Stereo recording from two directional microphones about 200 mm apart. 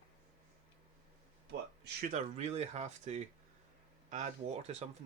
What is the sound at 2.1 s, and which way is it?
Speech, 35° right (ahead or behind).